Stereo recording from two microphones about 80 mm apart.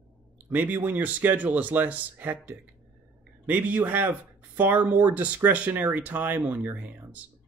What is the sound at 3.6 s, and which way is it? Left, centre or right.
Speech, centre.